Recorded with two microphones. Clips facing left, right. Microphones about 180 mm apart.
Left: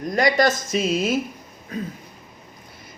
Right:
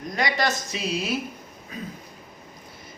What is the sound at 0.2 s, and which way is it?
A man's voice, 50° left (ahead or behind).